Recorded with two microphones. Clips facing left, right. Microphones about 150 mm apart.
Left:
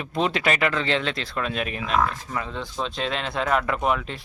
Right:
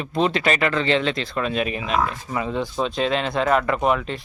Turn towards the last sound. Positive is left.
turn(degrees=0)  # may be behind; listen again after turning